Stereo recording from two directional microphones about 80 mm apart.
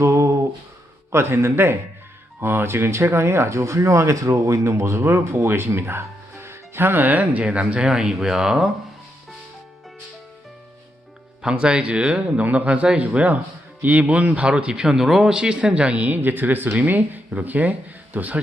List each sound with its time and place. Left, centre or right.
0.0 s a sound: right
1.1 s speech: right; by 8.7 s centre
11.4 s speech: centre